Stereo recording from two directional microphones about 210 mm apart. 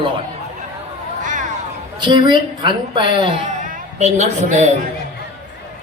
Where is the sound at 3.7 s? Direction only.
35° right (ahead or behind).